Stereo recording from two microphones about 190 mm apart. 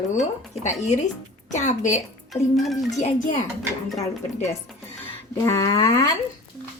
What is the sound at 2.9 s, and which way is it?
Speech, 35° left (ahead or behind).